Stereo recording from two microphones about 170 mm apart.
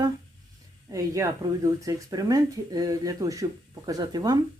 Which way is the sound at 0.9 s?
20° right (ahead or behind).